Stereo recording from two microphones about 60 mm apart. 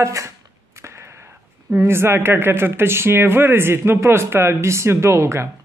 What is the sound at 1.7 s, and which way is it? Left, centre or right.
Speech, right.